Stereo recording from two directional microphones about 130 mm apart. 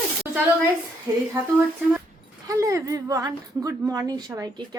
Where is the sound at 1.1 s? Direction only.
25° right (ahead or behind).